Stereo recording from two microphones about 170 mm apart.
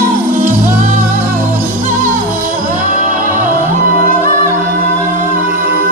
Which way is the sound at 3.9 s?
55° right (ahead or behind).